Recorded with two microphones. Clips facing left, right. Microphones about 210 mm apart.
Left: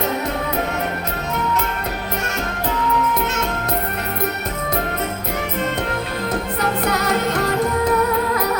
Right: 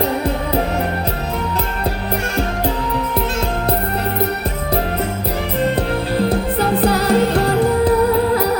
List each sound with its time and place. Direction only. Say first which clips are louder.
6.1 s music: right 9 dB; 30° right (ahead or behind)